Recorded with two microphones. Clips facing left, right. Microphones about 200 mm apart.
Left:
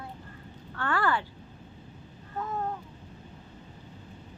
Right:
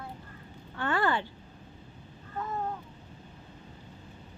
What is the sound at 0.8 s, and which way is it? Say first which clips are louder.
Speech: even; 20° right (ahead or behind).